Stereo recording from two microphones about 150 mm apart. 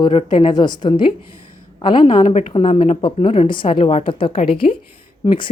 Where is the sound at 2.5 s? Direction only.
35° left (ahead or behind).